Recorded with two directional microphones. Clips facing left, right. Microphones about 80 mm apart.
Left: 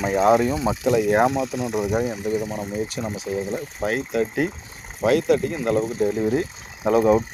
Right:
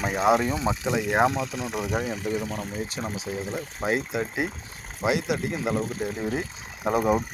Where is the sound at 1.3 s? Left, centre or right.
Left.